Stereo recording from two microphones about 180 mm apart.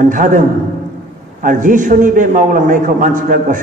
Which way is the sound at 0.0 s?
45° right (ahead or behind).